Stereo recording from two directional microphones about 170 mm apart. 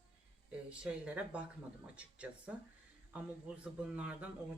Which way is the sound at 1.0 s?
10° right (ahead or behind).